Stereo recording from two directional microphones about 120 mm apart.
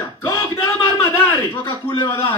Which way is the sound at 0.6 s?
25° left (ahead or behind).